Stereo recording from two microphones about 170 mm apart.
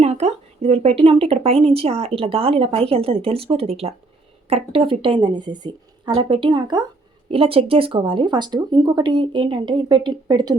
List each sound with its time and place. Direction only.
0.0 s a woman's voice: 40° right (ahead or behind); by 10.5 s 25° right (ahead or behind)